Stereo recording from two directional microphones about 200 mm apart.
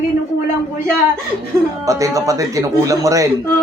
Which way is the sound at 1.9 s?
15° right (ahead or behind).